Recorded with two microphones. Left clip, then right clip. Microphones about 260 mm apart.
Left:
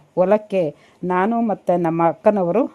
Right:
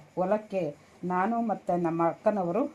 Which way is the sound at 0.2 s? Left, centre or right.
Left.